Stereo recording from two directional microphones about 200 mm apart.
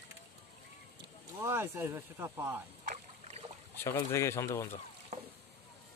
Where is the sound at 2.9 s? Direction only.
30° right (ahead or behind).